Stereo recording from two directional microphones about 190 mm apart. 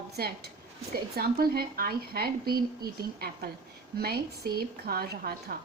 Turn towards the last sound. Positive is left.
turn(degrees=-50)  # may be behind; listen again after turning